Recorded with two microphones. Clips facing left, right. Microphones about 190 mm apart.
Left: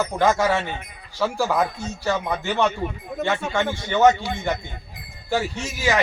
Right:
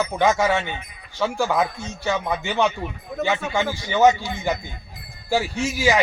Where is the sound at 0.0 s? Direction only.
Centre (ahead or behind).